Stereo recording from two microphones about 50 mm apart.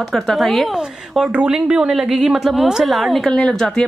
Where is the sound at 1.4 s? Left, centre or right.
Centre.